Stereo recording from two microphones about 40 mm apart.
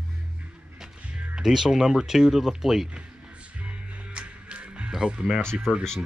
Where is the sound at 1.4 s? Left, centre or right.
Centre.